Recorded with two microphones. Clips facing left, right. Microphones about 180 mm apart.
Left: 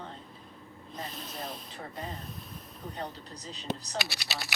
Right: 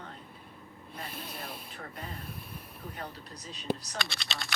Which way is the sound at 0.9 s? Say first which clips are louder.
Left 2 dB; 10° right (ahead or behind).